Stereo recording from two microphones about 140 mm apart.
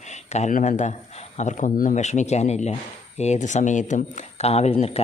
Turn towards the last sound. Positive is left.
turn(degrees=45)  # may be behind; listen again after turning